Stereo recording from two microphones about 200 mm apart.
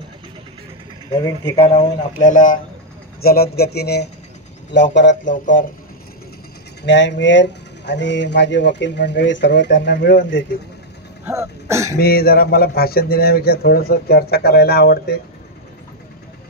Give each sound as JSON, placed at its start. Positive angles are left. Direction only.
{"t": 1.1, "sound": "speech", "side_deg": 20}
{"t": 1.6, "sound": "a man's voice", "side_deg": 35}
{"t": 5.3, "sound": "speech", "side_deg": 40}
{"t": 6.9, "sound": "speech", "side_deg": 65}
{"t": 11.2, "sound": "throat clearing", "side_deg": -15}
{"t": 12.0, "sound": "a man's voice", "side_deg": 50}